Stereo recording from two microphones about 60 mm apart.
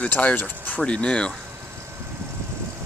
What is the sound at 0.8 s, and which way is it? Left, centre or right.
Speech, centre.